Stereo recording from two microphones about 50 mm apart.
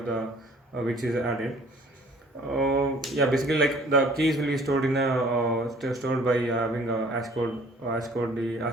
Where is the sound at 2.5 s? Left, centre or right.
Centre.